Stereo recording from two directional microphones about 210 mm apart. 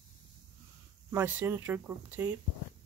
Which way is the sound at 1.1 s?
10° right (ahead or behind).